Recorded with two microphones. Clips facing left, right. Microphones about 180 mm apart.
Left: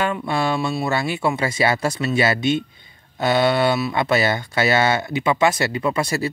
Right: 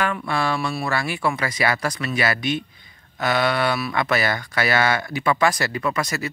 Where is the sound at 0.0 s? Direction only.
20° left (ahead or behind).